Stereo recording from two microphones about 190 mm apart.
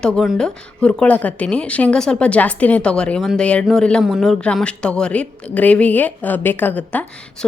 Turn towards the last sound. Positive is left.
turn(degrees=10)  # may be behind; listen again after turning